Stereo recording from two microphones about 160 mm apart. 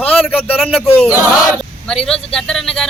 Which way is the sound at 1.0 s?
10° right (ahead or behind).